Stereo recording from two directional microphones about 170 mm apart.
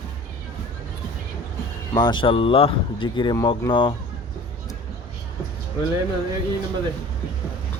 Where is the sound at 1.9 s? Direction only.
25° left (ahead or behind).